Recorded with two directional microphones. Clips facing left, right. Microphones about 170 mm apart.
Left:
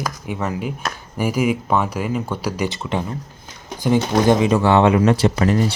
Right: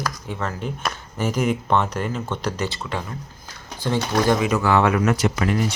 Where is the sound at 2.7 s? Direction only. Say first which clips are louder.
Left 5 dB; 20° left (ahead or behind).